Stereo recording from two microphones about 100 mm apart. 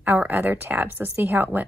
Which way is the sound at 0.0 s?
20° right (ahead or behind).